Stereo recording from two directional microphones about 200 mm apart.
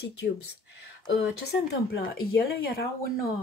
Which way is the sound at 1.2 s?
60° left (ahead or behind).